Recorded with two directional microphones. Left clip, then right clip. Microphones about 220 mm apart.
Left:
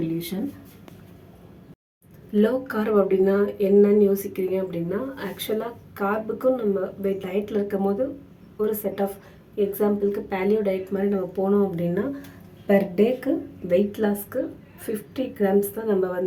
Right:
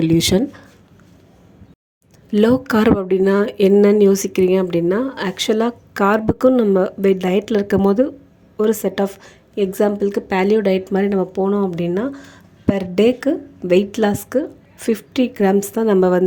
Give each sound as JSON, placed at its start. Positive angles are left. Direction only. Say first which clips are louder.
{"t": 0.0, "sound": "speech", "louder": "right 13 dB", "side_deg": -45}
{"t": 2.3, "sound": "a woman's voice", "louder": "right 7 dB", "side_deg": -45}